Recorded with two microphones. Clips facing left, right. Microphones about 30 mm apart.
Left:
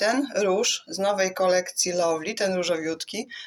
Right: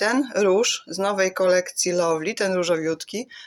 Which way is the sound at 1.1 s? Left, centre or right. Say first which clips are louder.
Right 3 dB; centre.